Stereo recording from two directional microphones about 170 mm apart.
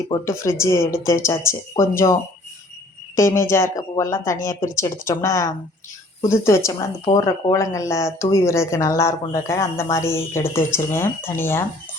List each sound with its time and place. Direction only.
0.6 s speech: 15° left (ahead or behind)
3.2 s speech: 15° left (ahead or behind)